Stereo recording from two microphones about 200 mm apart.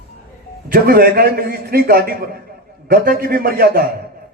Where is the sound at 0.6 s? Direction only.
45° right (ahead or behind).